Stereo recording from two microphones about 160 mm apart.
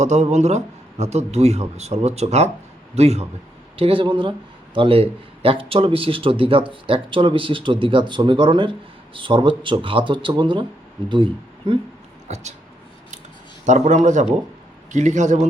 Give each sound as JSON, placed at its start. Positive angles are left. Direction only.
{"t": 0.0, "sound": "a man's voice", "side_deg": -45}
{"t": 12.3, "sound": "a man's voice", "side_deg": -45}
{"t": 13.7, "sound": "a man's voice", "side_deg": -50}